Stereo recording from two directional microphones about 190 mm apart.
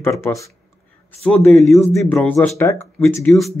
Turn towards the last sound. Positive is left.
turn(degrees=10)  # may be behind; listen again after turning